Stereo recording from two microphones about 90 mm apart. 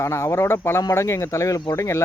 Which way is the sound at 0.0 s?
30° left (ahead or behind).